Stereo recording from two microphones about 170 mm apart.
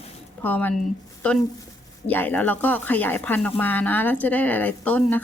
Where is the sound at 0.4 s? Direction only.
10° left (ahead or behind).